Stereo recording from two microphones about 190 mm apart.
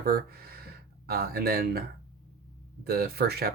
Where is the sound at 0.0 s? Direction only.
50° right (ahead or behind).